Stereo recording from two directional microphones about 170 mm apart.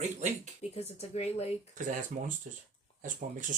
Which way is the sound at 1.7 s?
50° right (ahead or behind).